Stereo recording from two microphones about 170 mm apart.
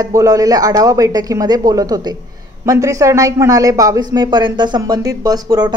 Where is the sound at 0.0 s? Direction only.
20° right (ahead or behind).